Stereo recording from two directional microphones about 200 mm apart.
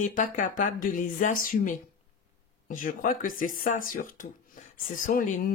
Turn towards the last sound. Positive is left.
turn(degrees=40)  # may be behind; listen again after turning